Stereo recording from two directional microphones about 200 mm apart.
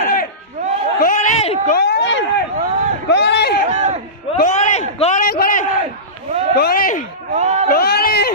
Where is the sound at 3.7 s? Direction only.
35° right (ahead or behind).